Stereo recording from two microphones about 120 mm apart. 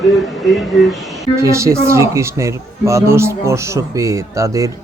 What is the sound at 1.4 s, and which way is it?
A man's voice, 25° right (ahead or behind).